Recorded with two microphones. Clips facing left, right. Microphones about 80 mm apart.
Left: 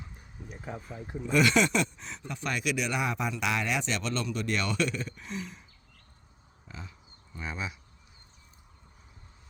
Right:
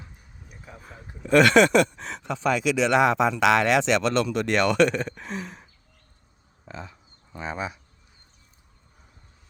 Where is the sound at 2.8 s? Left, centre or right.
Right.